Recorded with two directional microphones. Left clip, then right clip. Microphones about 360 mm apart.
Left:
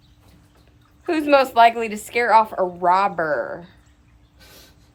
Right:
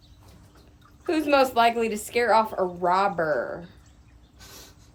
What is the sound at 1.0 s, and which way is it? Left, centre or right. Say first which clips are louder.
A woman's voice: left 4 dB; centre.